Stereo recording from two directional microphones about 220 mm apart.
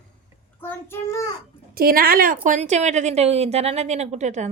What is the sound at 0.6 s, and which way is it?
Child singing, 10° left (ahead or behind).